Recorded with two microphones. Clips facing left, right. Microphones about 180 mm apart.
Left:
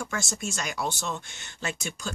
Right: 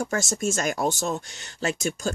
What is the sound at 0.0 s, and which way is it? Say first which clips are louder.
Speech: right 7 dB; 45° right (ahead or behind).